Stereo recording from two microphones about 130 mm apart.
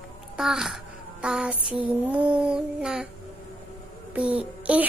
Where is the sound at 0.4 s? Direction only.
5° right (ahead or behind).